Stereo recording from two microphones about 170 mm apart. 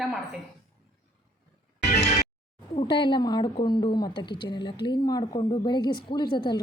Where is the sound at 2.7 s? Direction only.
30° left (ahead or behind).